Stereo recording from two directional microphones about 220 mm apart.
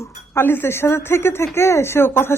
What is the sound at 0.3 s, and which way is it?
Speech, 10° left (ahead or behind).